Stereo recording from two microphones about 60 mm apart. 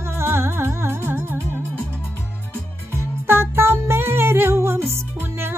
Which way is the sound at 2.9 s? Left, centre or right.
Right.